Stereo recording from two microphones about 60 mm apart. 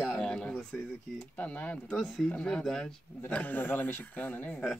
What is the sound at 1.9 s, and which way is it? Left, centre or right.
Speech, left.